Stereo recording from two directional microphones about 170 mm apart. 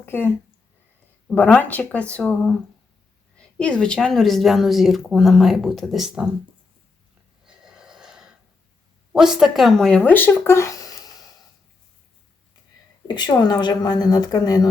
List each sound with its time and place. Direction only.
0.0 s speech: 15° left (ahead or behind); by 6.3 s 5° right (ahead or behind)
7.4 s snort: 5° right (ahead or behind)
9.1 s speech: 5° right (ahead or behind); by 11.1 s 20° left (ahead or behind)
13.1 s speech: 25° left (ahead or behind)